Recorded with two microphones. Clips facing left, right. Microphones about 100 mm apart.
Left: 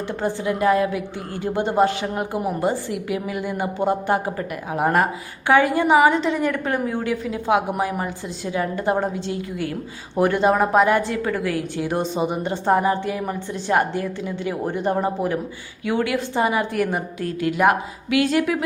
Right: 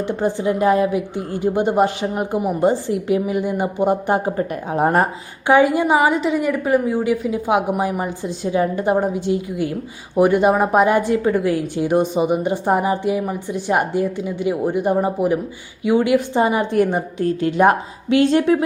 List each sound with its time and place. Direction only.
0.1 s a woman's voice: 15° right (ahead or behind)
4.4 s a woman's voice: 30° right (ahead or behind)
5.5 s a woman's voice: 15° right (ahead or behind)